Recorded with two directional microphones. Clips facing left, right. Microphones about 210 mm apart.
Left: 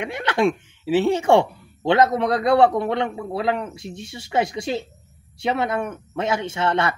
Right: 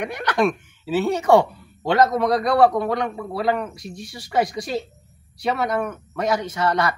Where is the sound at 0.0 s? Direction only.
25° left (ahead or behind).